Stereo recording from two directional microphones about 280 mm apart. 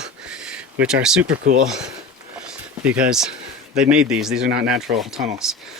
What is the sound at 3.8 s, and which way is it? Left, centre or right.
Speech, centre.